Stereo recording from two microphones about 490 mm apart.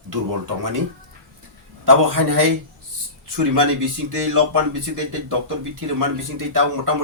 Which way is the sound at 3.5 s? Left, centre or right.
Right.